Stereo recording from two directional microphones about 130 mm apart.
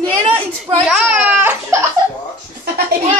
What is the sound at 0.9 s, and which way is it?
Speech, 10° right (ahead or behind).